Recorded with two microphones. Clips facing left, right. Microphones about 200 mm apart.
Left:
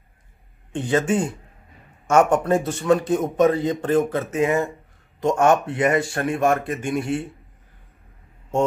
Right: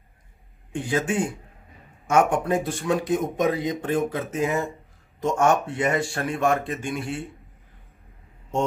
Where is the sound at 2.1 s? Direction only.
Centre (ahead or behind).